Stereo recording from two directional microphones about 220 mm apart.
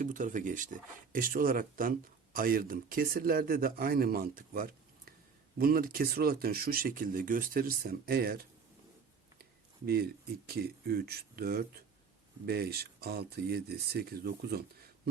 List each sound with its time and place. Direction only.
0.0 s speech: 35° right (ahead or behind)